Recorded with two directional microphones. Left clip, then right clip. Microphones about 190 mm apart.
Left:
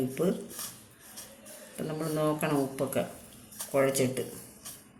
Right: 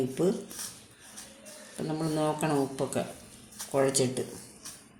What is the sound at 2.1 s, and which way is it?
Speech, 30° right (ahead or behind).